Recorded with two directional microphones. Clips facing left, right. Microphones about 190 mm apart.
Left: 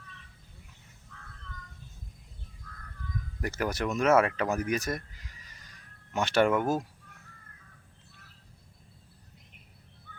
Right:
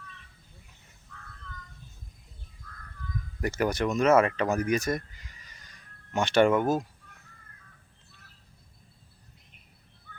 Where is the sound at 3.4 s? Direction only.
Centre (ahead or behind).